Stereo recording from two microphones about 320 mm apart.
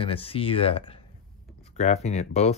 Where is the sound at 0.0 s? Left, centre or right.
Centre.